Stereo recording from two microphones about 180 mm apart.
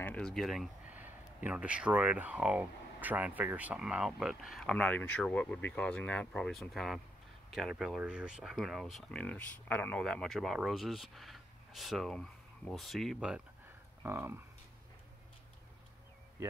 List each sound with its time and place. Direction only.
0.0 s speech: 5° left (ahead or behind)
14.0 s speech: 15° right (ahead or behind)